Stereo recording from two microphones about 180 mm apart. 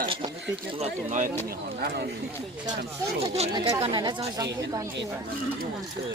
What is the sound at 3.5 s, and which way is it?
A woman's voice, 20° right (ahead or behind).